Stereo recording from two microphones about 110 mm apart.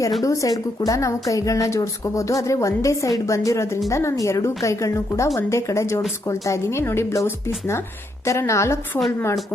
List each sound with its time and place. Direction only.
0.2 s a woman's voice: 30° left (ahead or behind)